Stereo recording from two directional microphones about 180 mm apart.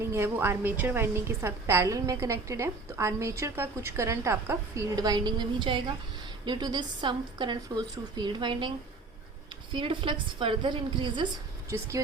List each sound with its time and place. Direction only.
0.0 s a woman's voice: 15° right (ahead or behind)
9.7 s a woman's voice: 25° right (ahead or behind)